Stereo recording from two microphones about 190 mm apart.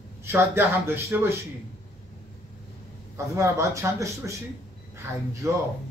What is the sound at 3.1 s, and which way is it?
A man's voice, 15° right (ahead or behind).